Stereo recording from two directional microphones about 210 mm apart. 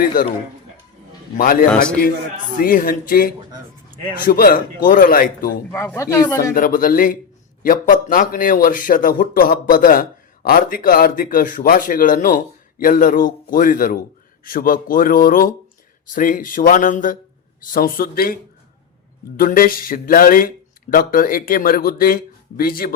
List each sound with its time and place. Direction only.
0.0 s speech: 45° left (ahead or behind)
1.4 s speech: 45° left (ahead or behind)
5.7 s speech: 10° left (ahead or behind)
6.5 s a man's voice: 40° left (ahead or behind)
19.4 s speech: 45° left (ahead or behind)